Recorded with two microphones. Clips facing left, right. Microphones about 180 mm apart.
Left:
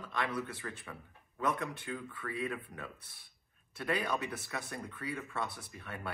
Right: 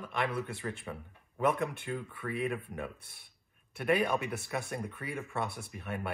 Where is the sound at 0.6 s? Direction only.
25° right (ahead or behind).